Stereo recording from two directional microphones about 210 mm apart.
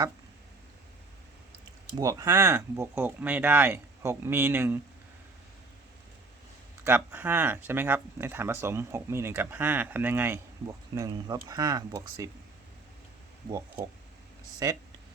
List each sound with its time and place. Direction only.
2.0 s speech: 15° right (ahead or behind)
6.8 s speech: 10° right (ahead or behind)
14.6 s speech: 15° right (ahead or behind)